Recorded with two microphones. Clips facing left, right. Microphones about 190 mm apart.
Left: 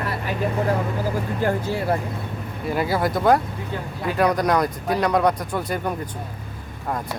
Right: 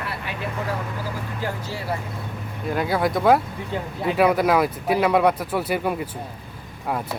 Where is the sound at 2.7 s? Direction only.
5° left (ahead or behind).